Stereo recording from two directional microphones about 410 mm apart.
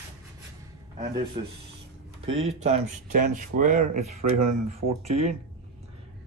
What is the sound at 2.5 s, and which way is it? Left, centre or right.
Speech, centre.